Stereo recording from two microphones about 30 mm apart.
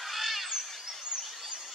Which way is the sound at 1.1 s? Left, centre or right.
Right.